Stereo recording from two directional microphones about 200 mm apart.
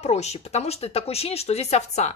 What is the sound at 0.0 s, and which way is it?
A woman's voice, 35° left (ahead or behind).